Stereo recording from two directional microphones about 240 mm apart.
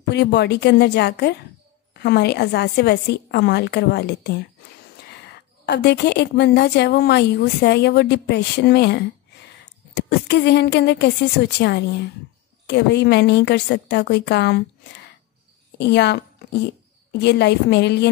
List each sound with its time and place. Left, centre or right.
0.1 s a woman's voice: left